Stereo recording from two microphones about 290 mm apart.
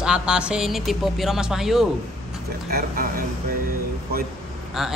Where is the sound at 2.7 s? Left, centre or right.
Right.